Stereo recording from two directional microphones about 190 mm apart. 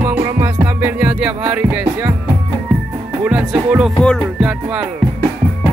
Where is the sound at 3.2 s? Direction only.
5° right (ahead or behind).